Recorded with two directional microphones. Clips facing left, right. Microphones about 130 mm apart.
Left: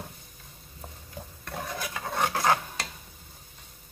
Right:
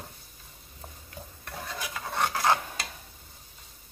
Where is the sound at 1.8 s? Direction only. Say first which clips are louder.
Even; 5° left (ahead or behind).